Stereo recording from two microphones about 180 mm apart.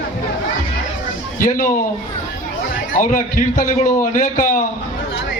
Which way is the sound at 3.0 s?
45° left (ahead or behind).